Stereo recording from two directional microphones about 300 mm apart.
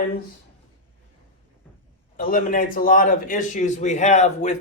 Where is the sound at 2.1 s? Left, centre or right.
Left.